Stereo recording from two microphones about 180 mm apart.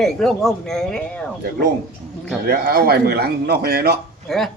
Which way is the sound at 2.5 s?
55° right (ahead or behind).